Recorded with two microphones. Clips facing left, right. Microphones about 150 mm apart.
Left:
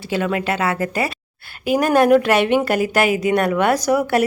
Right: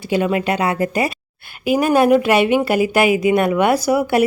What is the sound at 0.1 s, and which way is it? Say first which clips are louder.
Speech: right 3 dB; 15° right (ahead or behind).